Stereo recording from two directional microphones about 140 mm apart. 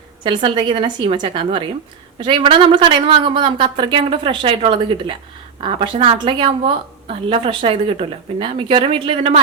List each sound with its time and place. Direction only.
0.4 s a woman's voice: 35° right (ahead or behind)